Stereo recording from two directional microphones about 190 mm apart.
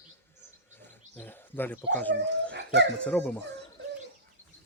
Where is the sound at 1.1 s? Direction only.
10° left (ahead or behind).